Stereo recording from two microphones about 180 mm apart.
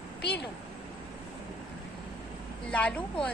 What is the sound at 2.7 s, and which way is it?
Speech, 5° left (ahead or behind).